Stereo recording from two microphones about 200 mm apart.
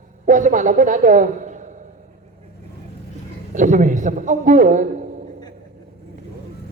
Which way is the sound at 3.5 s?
40° right (ahead or behind).